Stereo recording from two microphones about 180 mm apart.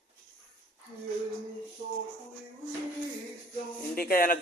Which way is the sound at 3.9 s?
55° left (ahead or behind).